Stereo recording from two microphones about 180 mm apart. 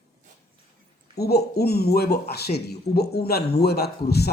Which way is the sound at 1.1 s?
65° left (ahead or behind).